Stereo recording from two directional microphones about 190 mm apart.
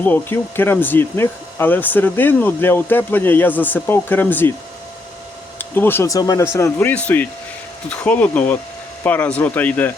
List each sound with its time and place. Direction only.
0.0 s speech: 10° left (ahead or behind)
5.5 s speech: 10° left (ahead or behind)